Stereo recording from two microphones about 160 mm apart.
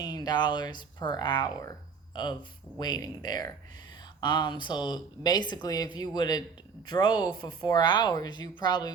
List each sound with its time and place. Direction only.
0.0 s speech: 25° left (ahead or behind)
2.7 s speech: 25° left (ahead or behind)